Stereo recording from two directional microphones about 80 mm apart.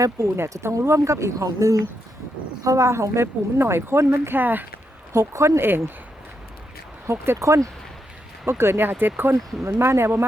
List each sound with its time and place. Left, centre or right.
0.3 s speech: right
5.1 s speech: right
7.3 s speech: right